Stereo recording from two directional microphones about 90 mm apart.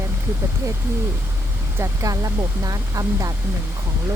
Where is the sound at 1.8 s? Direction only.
40° right (ahead or behind).